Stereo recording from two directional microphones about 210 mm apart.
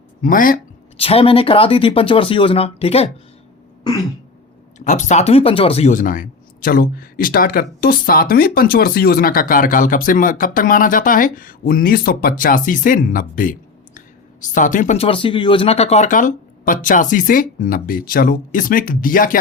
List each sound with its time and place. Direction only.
0.2 s speech: 40° left (ahead or behind)
0.9 s speech: 25° left (ahead or behind)
4.8 s speech: 35° left (ahead or behind)